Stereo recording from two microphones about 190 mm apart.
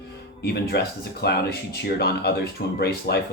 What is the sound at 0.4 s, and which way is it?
Speech, 60° left (ahead or behind).